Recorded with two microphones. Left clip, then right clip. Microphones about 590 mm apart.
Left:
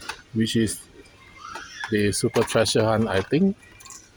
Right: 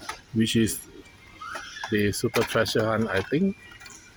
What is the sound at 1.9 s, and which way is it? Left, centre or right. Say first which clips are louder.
Speech: left 2 dB; right.